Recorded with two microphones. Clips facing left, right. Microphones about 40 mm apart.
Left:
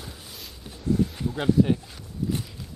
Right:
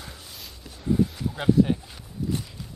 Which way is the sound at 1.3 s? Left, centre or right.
Centre.